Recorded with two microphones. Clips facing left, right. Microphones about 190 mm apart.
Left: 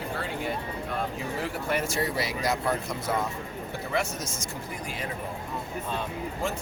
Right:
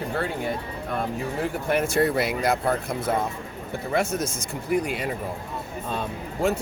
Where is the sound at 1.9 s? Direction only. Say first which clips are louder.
Right 7 dB; 60° right (ahead or behind).